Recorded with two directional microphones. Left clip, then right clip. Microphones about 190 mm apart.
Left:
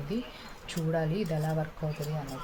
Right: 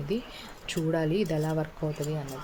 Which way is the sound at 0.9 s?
50° right (ahead or behind).